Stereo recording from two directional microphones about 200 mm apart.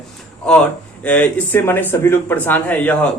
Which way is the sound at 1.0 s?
5° left (ahead or behind).